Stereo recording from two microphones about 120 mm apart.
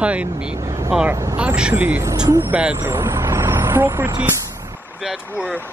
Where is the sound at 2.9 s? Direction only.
20° right (ahead or behind).